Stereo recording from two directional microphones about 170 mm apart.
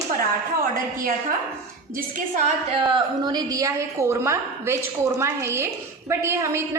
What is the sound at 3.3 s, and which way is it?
A woman's voice, 20° right (ahead or behind).